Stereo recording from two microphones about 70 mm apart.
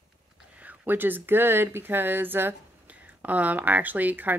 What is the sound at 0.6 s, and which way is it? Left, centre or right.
Speech, right.